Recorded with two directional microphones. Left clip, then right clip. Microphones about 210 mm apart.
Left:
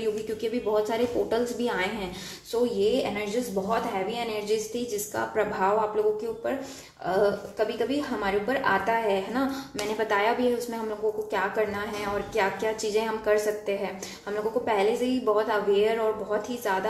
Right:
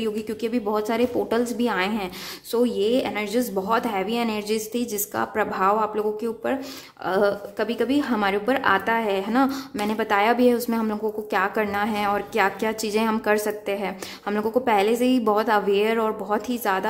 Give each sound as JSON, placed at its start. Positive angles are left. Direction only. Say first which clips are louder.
{"t": 0.0, "sound": "a woman's voice", "louder": "right 2 dB", "side_deg": -35}
{"t": 2.5, "sound": "a woman's voice", "louder": "right 3 dB", "side_deg": -40}
{"t": 7.1, "sound": "a woman's voice", "louder": "right 3 dB", "side_deg": -40}